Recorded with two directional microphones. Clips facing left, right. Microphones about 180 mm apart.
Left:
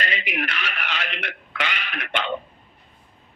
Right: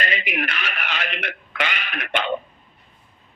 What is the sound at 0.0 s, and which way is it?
A man's voice, 50° right (ahead or behind).